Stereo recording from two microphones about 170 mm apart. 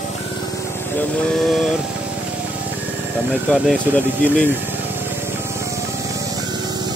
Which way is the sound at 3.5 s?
5° left (ahead or behind).